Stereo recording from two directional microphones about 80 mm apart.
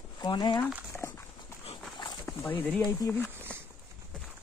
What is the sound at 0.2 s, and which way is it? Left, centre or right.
Speech, left.